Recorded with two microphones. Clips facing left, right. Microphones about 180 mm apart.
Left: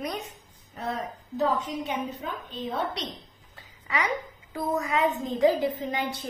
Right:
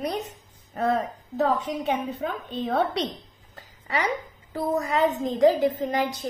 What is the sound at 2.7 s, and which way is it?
Speech, 65° right (ahead or behind).